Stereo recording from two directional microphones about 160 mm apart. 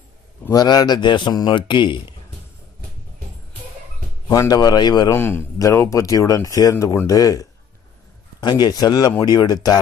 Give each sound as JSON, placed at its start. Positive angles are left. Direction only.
{"t": 0.5, "sound": "speech", "side_deg": 25}
{"t": 4.3, "sound": "speech", "side_deg": 25}
{"t": 5.1, "sound": "speech", "side_deg": 15}